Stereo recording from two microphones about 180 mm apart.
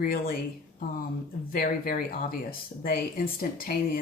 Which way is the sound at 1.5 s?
55° left (ahead or behind).